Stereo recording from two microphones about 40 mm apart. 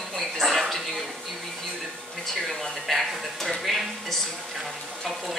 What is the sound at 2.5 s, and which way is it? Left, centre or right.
Speech, centre.